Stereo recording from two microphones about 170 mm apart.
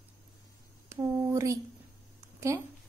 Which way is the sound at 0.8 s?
20° right (ahead or behind).